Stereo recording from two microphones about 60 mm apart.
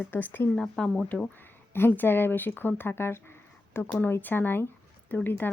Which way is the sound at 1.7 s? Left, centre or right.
Left.